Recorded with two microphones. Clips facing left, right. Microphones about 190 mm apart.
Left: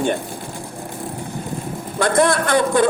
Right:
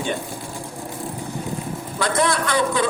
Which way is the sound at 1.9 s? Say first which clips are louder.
Left 5 dB; 50° left (ahead or behind).